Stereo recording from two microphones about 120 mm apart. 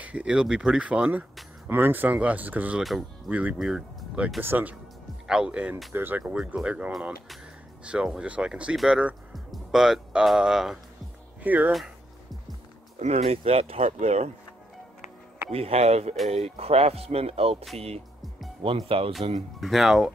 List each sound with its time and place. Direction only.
0.0 s speech: 10° right (ahead or behind)
5.9 s speech: 15° right (ahead or behind)
11.4 s speech: 15° right (ahead or behind)
13.0 s speech: 60° right (ahead or behind)
15.5 s speech: 55° right (ahead or behind)
19.6 s speech: centre (ahead or behind)